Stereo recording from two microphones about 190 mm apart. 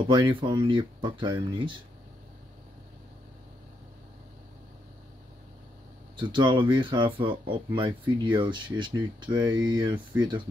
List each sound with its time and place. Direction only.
0.0 s speech: 25° right (ahead or behind)
6.1 s speech: 25° right (ahead or behind)